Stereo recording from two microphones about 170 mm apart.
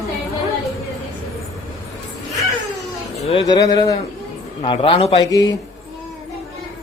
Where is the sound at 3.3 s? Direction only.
25° left (ahead or behind).